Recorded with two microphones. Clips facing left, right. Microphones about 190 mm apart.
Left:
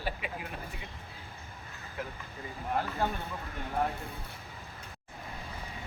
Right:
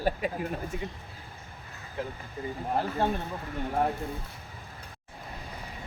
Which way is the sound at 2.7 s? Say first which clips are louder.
Right 3 dB; 30° right (ahead or behind).